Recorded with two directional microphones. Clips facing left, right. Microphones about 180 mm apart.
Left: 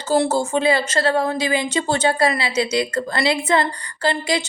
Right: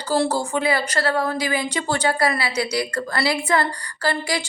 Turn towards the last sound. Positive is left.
turn(degrees=20)  # may be behind; listen again after turning